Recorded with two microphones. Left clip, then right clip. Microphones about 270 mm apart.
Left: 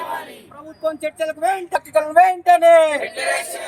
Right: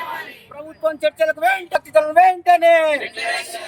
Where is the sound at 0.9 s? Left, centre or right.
Centre.